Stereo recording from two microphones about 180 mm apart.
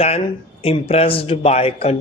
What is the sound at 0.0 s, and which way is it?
Speech, 35° left (ahead or behind).